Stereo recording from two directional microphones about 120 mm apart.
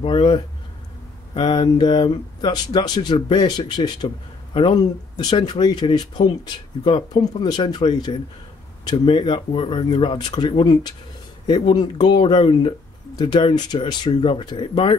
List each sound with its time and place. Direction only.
0.0 s speech: 45° left (ahead or behind)